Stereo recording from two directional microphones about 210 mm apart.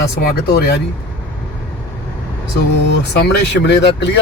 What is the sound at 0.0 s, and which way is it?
Speech, 50° left (ahead or behind).